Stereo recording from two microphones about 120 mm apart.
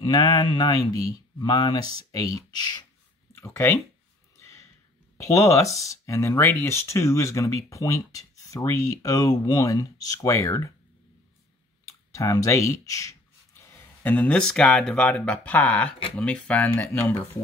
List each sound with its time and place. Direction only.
0.0 s speech: 35° left (ahead or behind)
3.3 s speech: 20° left (ahead or behind)
4.4 s a sound: 25° left (ahead or behind)
5.1 s speech: 25° left (ahead or behind)
11.8 s speech: 25° left (ahead or behind)
14.0 s speech: 10° left (ahead or behind)